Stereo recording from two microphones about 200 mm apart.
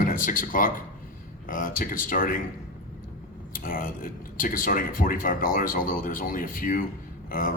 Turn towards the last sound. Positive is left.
turn(degrees=40)  # may be behind; listen again after turning